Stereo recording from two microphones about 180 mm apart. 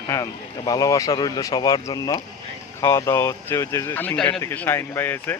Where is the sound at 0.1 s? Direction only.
20° left (ahead or behind).